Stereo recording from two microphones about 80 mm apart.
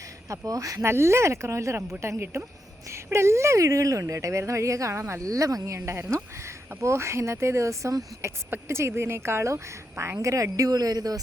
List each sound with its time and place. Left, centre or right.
0.3 s speech: right
0.9 s speech: right